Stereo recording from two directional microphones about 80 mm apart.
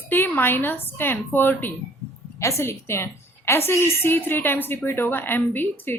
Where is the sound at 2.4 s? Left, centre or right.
Left.